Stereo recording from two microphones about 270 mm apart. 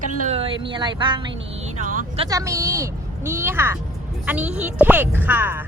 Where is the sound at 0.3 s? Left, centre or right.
Right.